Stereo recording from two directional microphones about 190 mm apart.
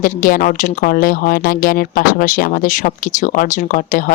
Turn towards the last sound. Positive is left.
turn(degrees=45)  # may be behind; listen again after turning